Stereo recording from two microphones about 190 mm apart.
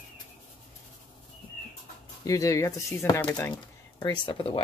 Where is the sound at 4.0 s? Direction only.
25° left (ahead or behind).